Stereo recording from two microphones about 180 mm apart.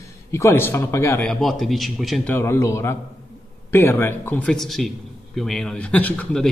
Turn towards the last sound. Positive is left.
turn(degrees=5)  # may be behind; listen again after turning